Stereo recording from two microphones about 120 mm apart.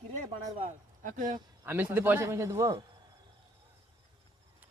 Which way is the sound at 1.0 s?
90° right.